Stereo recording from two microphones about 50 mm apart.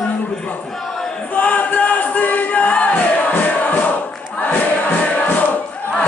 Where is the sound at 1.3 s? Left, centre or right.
Left.